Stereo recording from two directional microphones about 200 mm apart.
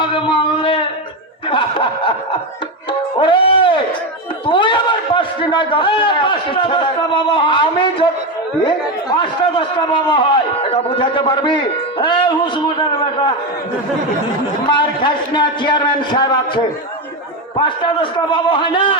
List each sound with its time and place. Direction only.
0.0 s a sound: 25° left (ahead or behind)
1.5 s snicker: 25° left (ahead or behind)
3.2 s a sound: 25° left (ahead or behind)
4.4 s speech: 25° left (ahead or behind)
14.7 s speech: 25° left (ahead or behind)
17.6 s speech: 25° left (ahead or behind)